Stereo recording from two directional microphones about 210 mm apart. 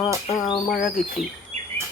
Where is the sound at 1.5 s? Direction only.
35° right (ahead or behind).